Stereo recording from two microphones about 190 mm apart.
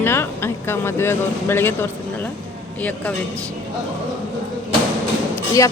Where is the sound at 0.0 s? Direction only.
10° left (ahead or behind).